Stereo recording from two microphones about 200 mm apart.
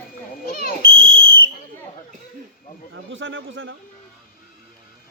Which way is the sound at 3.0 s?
70° right (ahead or behind).